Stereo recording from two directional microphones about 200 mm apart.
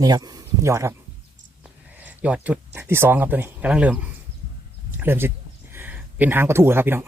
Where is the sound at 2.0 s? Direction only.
5° right (ahead or behind).